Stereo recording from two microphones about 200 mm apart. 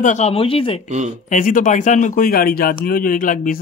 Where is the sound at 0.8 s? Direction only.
35° right (ahead or behind).